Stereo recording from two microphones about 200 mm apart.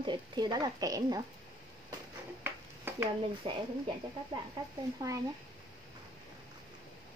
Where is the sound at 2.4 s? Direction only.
10° right (ahead or behind).